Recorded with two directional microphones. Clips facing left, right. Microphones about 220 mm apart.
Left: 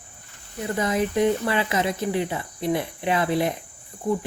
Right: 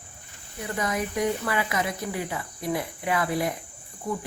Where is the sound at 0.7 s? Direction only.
25° left (ahead or behind).